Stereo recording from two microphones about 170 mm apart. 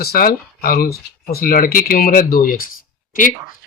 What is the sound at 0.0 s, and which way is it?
Speech, 60° left (ahead or behind).